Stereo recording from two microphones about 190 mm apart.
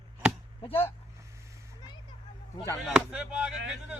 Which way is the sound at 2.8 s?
5° right (ahead or behind).